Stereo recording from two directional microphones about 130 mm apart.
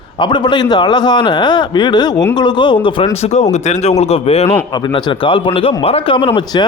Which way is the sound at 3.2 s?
55° left (ahead or behind).